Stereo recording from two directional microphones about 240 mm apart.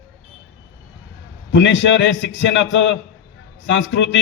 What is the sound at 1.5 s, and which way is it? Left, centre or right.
A man's voice, left.